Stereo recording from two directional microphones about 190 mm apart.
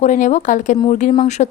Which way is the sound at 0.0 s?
40° left (ahead or behind).